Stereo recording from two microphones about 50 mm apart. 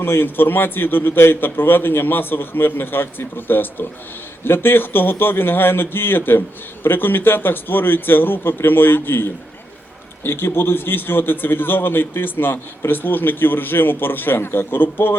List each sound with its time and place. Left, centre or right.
0.0 s a man's voice: left